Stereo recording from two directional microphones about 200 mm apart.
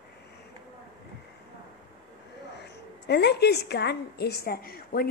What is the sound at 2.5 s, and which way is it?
A woman's voice, 55° left (ahead or behind).